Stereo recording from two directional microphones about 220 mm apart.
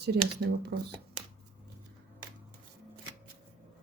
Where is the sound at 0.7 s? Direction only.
50° right (ahead or behind).